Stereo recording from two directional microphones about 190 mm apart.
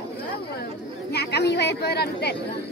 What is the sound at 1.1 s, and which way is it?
Chatter, 60° left (ahead or behind).